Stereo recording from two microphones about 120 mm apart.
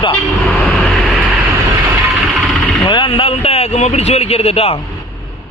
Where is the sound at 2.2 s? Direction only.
Centre (ahead or behind).